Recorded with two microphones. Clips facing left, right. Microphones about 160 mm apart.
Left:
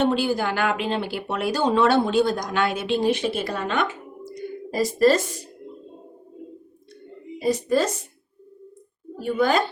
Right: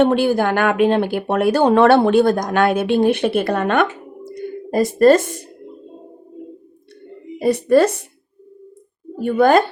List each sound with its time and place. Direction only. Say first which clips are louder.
0.0 s speech: right 7 dB; 55° right (ahead or behind)
7.3 s speech: right 7 dB; 60° right (ahead or behind)
9.1 s a woman's voice: right 7 dB; 55° right (ahead or behind)